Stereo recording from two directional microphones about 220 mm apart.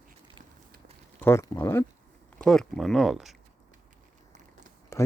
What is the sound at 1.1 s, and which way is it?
Speech, 10° left (ahead or behind).